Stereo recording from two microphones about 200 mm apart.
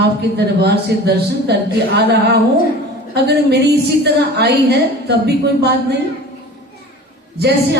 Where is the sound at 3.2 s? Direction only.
55° right (ahead or behind).